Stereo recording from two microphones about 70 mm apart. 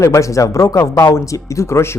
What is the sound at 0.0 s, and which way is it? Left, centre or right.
A man's voice, left.